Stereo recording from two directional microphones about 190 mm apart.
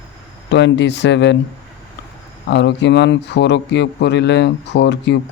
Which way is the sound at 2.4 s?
65° left (ahead or behind).